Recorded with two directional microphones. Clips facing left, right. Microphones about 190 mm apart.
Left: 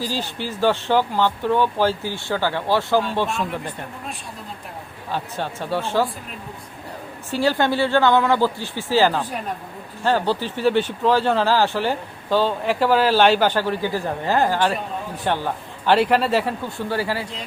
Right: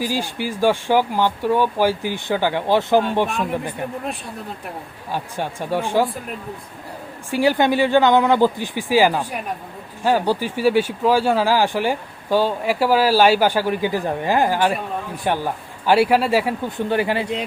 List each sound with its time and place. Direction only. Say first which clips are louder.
0.0 s speech: right 3 dB; 10° right (ahead or behind)
5.1 s speech: right 1 dB; 15° right (ahead or behind)
7.3 s speech: right 3 dB; 15° right (ahead or behind)